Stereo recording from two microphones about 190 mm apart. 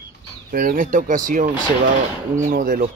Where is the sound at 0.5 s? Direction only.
45° right (ahead or behind).